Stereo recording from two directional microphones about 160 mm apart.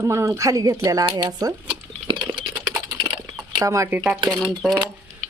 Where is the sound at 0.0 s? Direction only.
20° right (ahead or behind).